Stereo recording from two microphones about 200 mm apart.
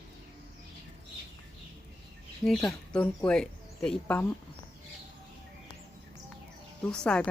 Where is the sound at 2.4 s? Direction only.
5° left (ahead or behind).